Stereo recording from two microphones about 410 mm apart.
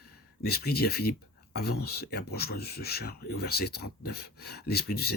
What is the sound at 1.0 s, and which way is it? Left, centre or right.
Speech, left.